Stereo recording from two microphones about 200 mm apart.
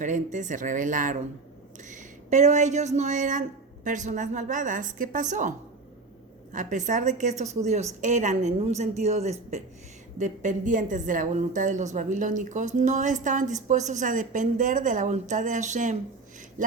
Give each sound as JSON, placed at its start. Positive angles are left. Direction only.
{"t": 0.0, "sound": "a woman's voice", "side_deg": -40}